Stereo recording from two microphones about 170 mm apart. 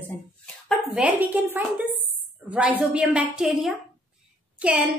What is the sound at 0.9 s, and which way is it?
A woman's voice, 10° right (ahead or behind).